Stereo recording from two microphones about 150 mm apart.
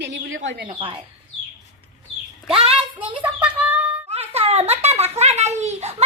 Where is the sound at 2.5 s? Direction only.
40° right (ahead or behind).